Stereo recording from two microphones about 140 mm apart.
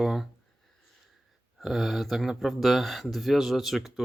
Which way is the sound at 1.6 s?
Centre (ahead or behind).